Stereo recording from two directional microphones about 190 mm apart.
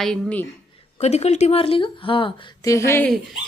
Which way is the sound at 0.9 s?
35° left (ahead or behind).